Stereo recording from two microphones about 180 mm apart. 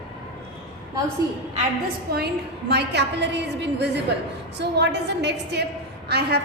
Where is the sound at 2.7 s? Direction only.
70° right (ahead or behind).